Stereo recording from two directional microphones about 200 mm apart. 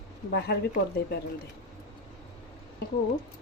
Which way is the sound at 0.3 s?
55° left (ahead or behind).